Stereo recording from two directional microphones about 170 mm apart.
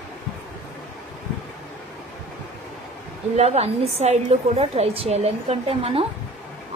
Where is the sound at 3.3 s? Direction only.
40° right (ahead or behind).